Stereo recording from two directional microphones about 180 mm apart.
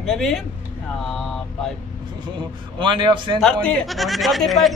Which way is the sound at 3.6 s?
Centre (ahead or behind).